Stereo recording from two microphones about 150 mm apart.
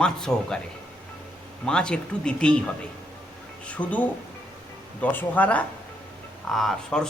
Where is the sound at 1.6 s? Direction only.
5° left (ahead or behind).